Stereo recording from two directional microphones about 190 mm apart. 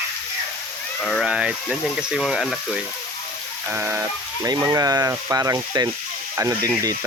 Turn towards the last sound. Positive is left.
turn(degrees=-20)  # may be behind; listen again after turning